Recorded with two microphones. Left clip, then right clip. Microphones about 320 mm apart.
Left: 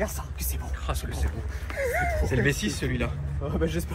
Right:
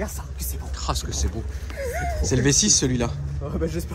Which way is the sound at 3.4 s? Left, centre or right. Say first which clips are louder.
Right 1 dB; centre.